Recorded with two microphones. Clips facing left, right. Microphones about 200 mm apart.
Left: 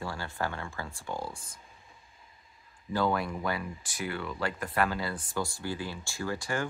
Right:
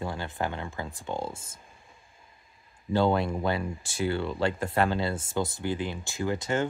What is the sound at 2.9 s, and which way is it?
Speech, 25° right (ahead or behind).